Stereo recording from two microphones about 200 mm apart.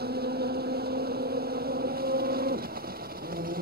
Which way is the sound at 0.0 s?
50° right (ahead or behind).